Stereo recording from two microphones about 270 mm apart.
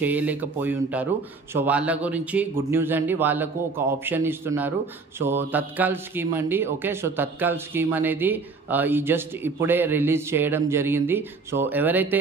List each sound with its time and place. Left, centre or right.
0.0 s speech: centre